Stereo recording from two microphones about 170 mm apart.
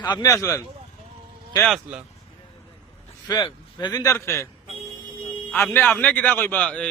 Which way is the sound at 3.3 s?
25° left (ahead or behind).